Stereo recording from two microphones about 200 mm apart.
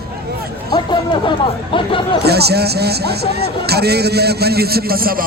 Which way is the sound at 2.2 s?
55° right (ahead or behind).